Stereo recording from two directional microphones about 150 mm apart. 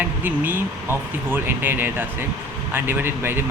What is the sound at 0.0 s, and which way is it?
Speech, 10° right (ahead or behind).